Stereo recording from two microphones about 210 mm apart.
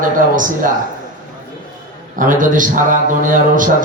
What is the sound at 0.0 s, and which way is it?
Speech, 40° right (ahead or behind).